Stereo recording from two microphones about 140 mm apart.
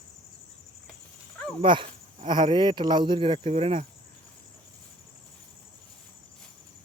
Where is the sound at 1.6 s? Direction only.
35° right (ahead or behind).